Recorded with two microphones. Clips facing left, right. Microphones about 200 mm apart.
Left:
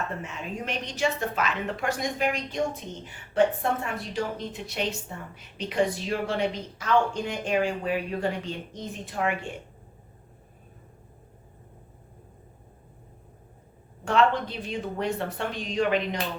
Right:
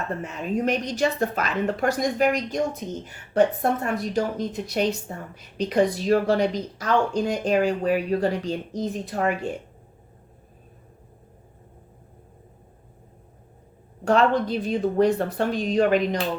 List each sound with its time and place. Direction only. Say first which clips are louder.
0.2 s a woman's voice: right 9 dB; 40° right (ahead or behind)
14.0 s a woman's voice: right 3 dB; 40° right (ahead or behind)